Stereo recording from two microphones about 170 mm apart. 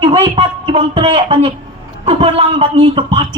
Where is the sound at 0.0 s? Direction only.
35° right (ahead or behind).